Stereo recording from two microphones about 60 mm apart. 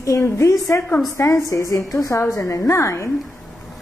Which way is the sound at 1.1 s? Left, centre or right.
Left.